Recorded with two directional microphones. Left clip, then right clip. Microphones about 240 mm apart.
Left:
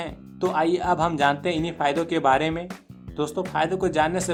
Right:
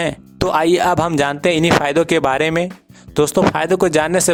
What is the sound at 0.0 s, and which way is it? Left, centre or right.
Speech, right.